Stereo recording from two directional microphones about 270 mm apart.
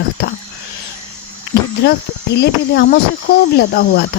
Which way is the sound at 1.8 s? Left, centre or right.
Left.